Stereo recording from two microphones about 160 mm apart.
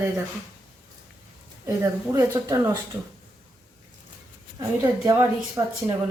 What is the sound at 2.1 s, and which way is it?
Speech, 20° right (ahead or behind).